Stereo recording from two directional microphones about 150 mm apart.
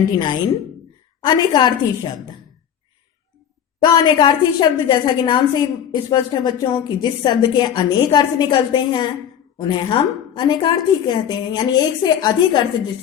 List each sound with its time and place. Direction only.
0.2 s a woman's voice: 30° left (ahead or behind)
3.8 s a woman's voice: 30° left (ahead or behind)